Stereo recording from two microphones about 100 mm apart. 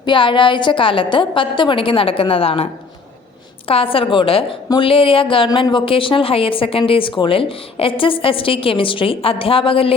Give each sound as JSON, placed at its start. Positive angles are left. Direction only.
{"t": 0.0, "sound": "speech", "side_deg": 55}
{"t": 3.7, "sound": "a woman's voice", "side_deg": 65}